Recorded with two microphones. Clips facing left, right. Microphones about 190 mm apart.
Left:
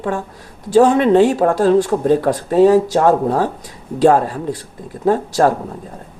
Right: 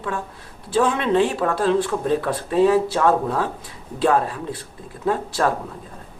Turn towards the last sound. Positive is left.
turn(degrees=40)  # may be behind; listen again after turning